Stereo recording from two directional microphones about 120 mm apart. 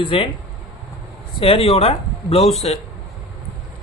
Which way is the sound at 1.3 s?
50° left (ahead or behind).